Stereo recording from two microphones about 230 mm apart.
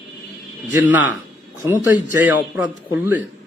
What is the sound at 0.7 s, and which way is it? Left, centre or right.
Speech, centre.